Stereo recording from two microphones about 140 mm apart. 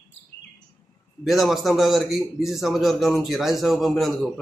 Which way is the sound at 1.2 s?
Centre (ahead or behind).